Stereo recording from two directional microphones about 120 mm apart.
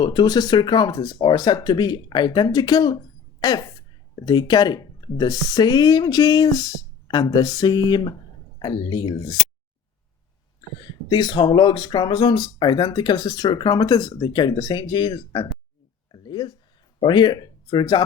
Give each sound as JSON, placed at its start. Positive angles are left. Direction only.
{"t": 0.0, "sound": "speech", "side_deg": 40}
{"t": 11.1, "sound": "speech", "side_deg": 35}
{"t": 16.1, "sound": "a sound", "side_deg": 35}
{"t": 17.0, "sound": "speech", "side_deg": 40}